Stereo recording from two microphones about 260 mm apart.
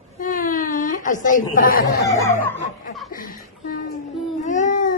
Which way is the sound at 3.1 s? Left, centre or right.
Left.